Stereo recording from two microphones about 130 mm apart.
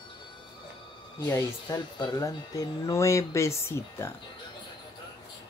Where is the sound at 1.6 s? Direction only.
35° left (ahead or behind).